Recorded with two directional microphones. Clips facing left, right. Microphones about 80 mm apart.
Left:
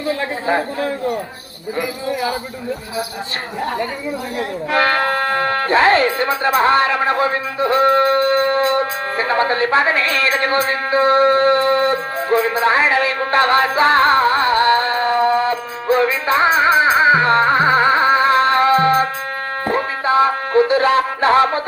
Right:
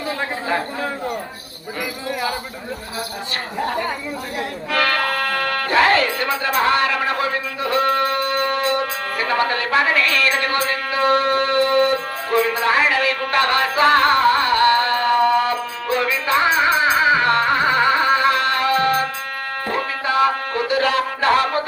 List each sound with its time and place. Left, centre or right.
4.7 s speech: left
19.6 s music: left